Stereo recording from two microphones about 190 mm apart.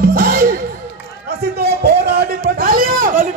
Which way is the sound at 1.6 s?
55° right (ahead or behind).